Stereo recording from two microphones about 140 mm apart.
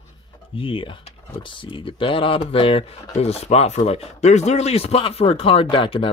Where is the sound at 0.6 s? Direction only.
40° left (ahead or behind).